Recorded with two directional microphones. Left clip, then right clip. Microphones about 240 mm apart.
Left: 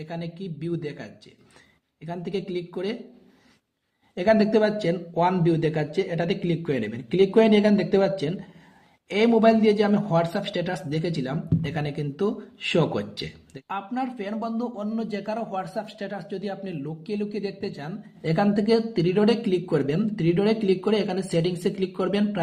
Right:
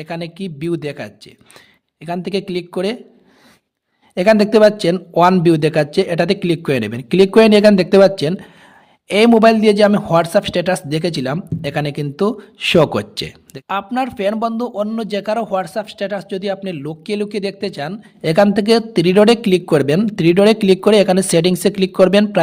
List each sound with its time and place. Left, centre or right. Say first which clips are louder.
0.0 s a man's voice: right 9 dB; right
4.1 s a man's voice: right 8 dB; right